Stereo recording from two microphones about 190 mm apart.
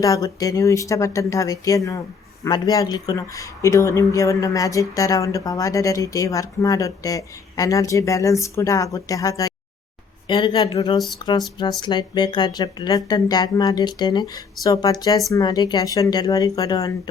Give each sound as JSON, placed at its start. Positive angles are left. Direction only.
{"t": 0.0, "sound": "speech", "side_deg": 20}